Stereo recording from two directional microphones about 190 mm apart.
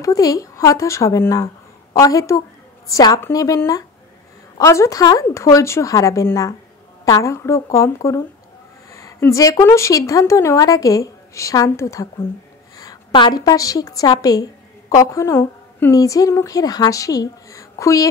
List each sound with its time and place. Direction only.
0.0 s a woman's voice: 20° left (ahead or behind)